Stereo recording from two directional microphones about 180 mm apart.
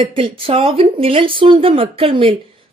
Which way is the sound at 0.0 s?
30° right (ahead or behind).